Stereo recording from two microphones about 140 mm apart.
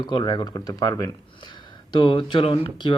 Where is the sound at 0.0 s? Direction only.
30° left (ahead or behind).